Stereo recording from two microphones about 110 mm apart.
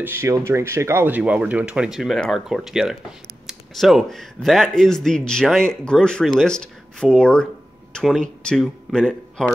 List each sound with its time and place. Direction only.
0.0 s speech: 20° right (ahead or behind); by 2.1 s 5° right (ahead or behind)
2.1 s speech: 5° left (ahead or behind)
2.4 s speech: 5° right (ahead or behind)